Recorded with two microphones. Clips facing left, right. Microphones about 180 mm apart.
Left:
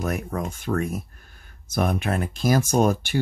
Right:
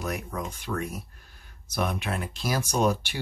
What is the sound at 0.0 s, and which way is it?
Speech, 50° left (ahead or behind).